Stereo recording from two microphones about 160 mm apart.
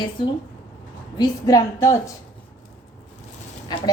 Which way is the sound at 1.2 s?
20° left (ahead or behind).